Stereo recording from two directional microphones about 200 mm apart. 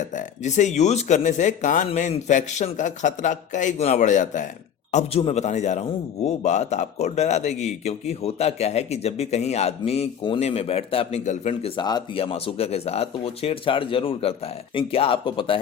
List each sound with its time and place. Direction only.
0.0 s a man's voice: 40° left (ahead or behind)